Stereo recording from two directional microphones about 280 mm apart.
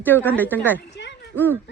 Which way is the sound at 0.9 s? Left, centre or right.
Left.